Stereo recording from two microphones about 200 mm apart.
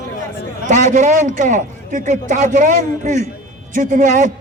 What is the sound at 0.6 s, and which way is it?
A man's voice, 40° right (ahead or behind).